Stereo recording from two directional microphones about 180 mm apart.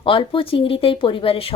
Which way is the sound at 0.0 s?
30° left (ahead or behind).